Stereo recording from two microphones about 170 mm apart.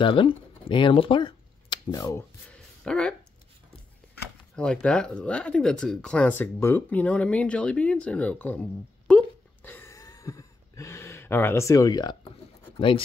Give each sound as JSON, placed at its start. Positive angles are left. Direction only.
{"t": 0.0, "sound": "speech", "side_deg": 30}
{"t": 2.5, "sound": "a sound", "side_deg": 5}
{"t": 4.6, "sound": "speech", "side_deg": 5}